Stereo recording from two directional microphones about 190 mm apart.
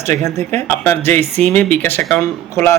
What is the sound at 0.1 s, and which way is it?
Speech, 40° right (ahead or behind).